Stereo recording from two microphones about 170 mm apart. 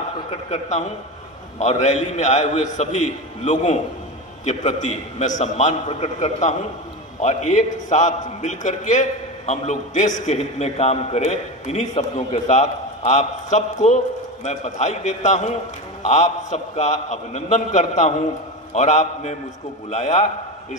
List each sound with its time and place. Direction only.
0.3 s a man's voice: 40° left (ahead or behind)
4.5 s a man's voice: 45° left (ahead or behind)